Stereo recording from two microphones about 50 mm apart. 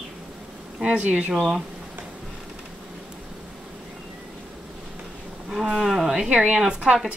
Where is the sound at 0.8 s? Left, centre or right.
Right.